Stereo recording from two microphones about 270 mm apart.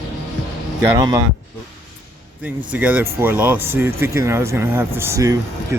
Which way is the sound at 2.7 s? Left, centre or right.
Centre.